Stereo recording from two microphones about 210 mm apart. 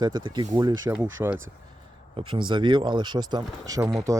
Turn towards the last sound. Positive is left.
turn(degrees=-15)  # may be behind; listen again after turning